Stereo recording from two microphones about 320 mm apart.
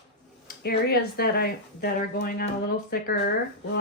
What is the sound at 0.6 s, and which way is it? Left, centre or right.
Speech, left.